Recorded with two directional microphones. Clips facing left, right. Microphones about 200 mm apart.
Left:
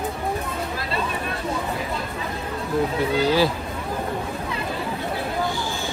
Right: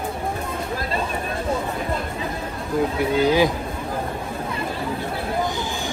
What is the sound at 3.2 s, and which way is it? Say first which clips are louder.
Speech: right 2 dB; 15° right (ahead or behind).